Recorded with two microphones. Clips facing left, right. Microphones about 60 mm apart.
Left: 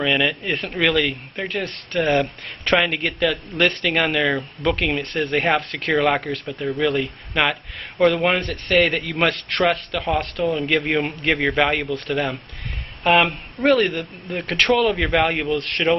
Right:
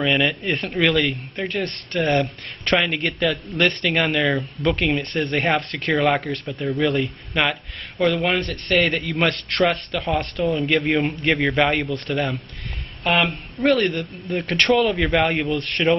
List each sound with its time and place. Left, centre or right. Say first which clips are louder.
0.0 s speech: even; centre